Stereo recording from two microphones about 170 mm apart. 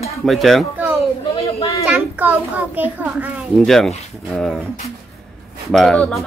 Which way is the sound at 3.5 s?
Centre (ahead or behind).